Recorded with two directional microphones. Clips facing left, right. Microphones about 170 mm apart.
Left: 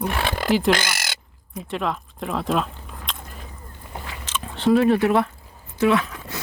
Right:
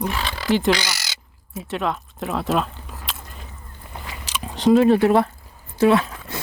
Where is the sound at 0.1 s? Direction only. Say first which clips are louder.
Left 2 dB; 55° left (ahead or behind).